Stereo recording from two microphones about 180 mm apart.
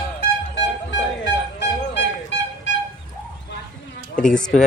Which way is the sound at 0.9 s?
75° left (ahead or behind).